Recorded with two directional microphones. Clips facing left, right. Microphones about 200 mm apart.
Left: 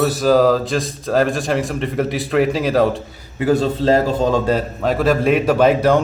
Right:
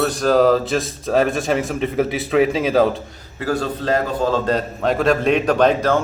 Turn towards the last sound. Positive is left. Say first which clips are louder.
# left 2 dB
turn(degrees=10)  # may be behind; listen again after turning